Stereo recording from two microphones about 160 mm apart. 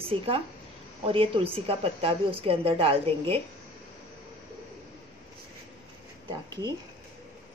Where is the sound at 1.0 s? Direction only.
35° right (ahead or behind).